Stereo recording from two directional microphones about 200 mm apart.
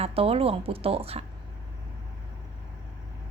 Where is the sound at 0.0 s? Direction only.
30° right (ahead or behind).